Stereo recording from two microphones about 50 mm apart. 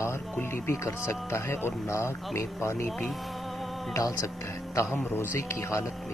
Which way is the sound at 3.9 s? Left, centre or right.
Left.